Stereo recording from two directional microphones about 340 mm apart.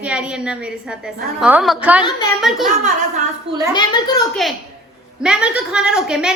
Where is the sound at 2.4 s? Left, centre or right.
Centre.